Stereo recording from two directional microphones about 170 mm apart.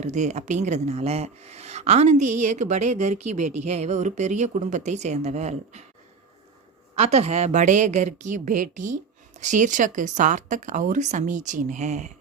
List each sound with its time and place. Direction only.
0.0 s a woman's voice: 45° right (ahead or behind)
6.9 s a woman's voice: 40° right (ahead or behind)